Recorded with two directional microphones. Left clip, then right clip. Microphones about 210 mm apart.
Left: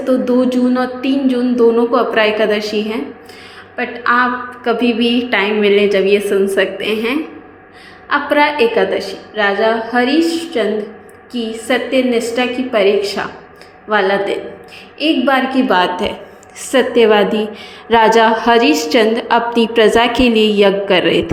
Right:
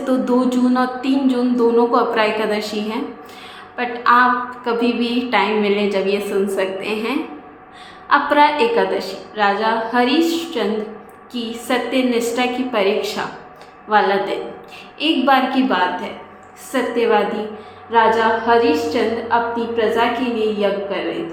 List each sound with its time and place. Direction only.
0.0 s a woman's voice: 5° left (ahead or behind)
15.7 s a woman's voice: 40° left (ahead or behind)